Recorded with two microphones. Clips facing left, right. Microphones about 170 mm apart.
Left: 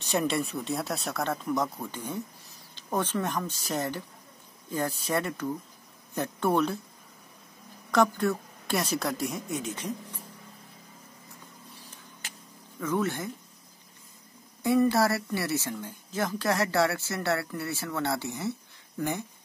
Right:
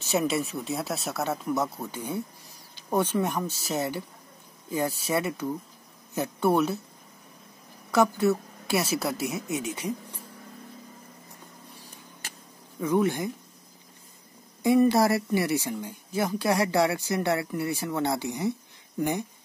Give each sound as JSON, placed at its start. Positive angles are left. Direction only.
{"t": 0.0, "sound": "speech", "side_deg": -5}
{"t": 7.9, "sound": "speech", "side_deg": -5}
{"t": 12.8, "sound": "speech", "side_deg": -15}
{"t": 14.6, "sound": "speech", "side_deg": -15}